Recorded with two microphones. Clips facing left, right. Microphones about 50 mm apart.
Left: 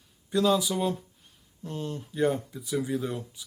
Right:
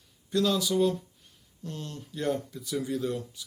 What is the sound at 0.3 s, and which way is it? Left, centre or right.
Speech, centre.